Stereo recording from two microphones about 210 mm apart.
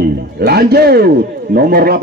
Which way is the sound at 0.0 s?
50° right (ahead or behind).